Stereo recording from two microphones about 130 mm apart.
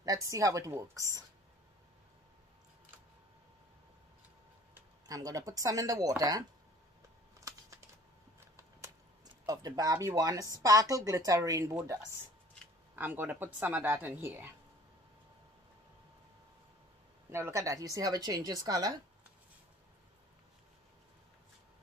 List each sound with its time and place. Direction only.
0.0 s speech: 25° right (ahead or behind)
5.0 s speech: 30° right (ahead or behind)
7.3 s typing: 25° right (ahead or behind)
8.5 s a sound: 25° right (ahead or behind)
10.5 s speech: 25° right (ahead or behind)
17.3 s speech: 20° right (ahead or behind)